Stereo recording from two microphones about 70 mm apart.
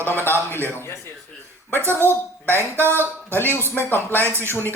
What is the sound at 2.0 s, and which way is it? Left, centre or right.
Speech, left.